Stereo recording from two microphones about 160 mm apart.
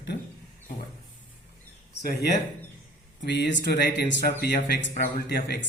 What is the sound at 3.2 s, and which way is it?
Speech, 90° left.